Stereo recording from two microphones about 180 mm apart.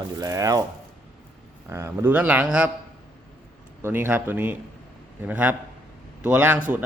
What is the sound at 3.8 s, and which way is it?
A man's voice, 10° right (ahead or behind).